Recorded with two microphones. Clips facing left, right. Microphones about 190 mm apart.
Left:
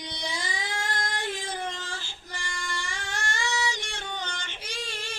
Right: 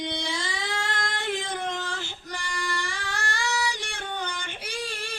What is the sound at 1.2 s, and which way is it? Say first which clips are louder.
Child singing: right 3 dB; 60° right (ahead or behind).